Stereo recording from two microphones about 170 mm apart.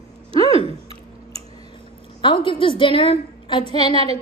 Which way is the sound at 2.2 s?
30° left (ahead or behind).